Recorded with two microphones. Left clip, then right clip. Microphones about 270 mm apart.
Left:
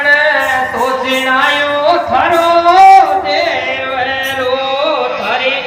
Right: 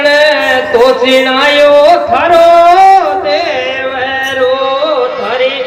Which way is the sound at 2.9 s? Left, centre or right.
Centre.